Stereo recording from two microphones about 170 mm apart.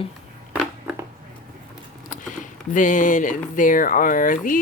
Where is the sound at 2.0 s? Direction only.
50° left (ahead or behind).